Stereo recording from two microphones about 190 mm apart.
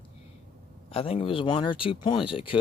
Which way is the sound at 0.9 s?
30° left (ahead or behind).